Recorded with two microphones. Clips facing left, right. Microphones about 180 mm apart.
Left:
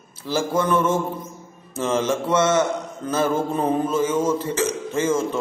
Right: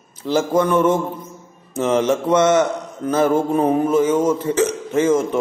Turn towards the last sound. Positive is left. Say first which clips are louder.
# right 5 dB
turn(degrees=-10)  # may be behind; listen again after turning